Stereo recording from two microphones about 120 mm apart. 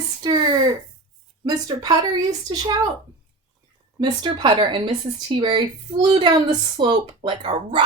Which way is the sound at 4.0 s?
40° right (ahead or behind).